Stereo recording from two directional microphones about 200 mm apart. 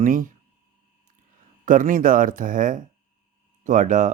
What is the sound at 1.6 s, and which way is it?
Speech, 40° right (ahead or behind).